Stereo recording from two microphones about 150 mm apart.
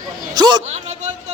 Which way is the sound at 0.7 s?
45° right (ahead or behind).